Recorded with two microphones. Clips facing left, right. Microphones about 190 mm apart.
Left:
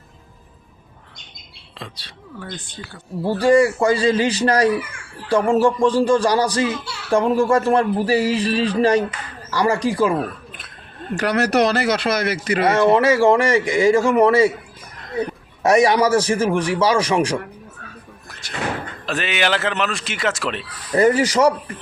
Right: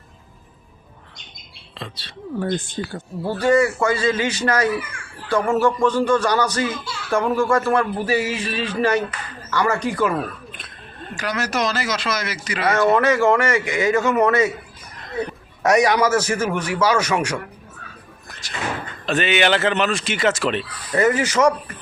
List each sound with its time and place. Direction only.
1.8 s speech: 10° left (ahead or behind)
2.4 s speech: 45° right (ahead or behind)
3.2 s speech: 30° left (ahead or behind)
11.1 s speech: 65° left (ahead or behind)
12.6 s speech: 30° left (ahead or behind)
15.6 s speech: 30° left (ahead or behind)
18.4 s speech: 60° left (ahead or behind)
19.0 s speech: centre (ahead or behind)
20.9 s speech: 35° left (ahead or behind)